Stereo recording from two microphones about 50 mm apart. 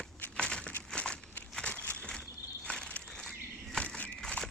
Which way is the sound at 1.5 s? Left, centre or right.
Centre.